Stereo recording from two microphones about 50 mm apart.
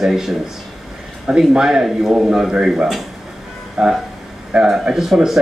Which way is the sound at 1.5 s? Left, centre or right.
Centre.